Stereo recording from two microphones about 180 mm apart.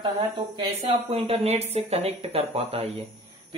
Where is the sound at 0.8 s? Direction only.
35° right (ahead or behind).